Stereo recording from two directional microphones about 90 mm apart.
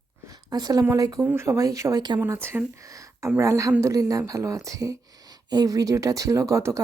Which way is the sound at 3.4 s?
35° right (ahead or behind).